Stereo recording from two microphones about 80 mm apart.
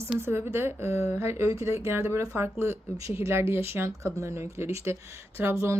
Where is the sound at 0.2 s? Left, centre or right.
Right.